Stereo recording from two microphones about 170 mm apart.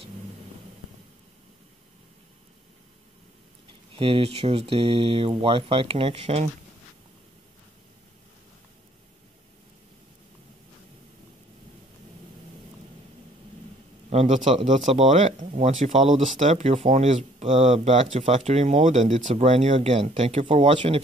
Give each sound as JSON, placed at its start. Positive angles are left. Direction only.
{"t": 3.9, "sound": "speech", "side_deg": -30}
{"t": 14.1, "sound": "speech", "side_deg": -40}